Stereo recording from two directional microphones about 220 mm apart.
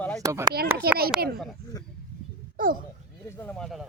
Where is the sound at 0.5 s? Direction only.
45° right (ahead or behind).